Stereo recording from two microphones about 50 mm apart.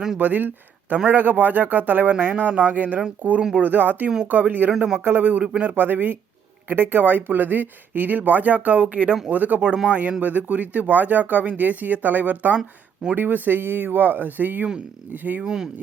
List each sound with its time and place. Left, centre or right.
0.2 s speech: right
9.6 s speech: centre
10.0 s speech: right
12.5 s speech: centre
13.1 s speech: right
15.4 s speech: centre